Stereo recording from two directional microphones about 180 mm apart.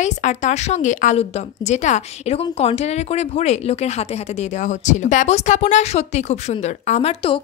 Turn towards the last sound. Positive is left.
turn(degrees=35)  # may be behind; listen again after turning